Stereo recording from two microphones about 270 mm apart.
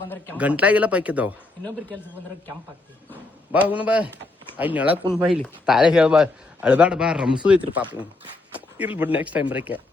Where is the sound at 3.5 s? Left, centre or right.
Centre.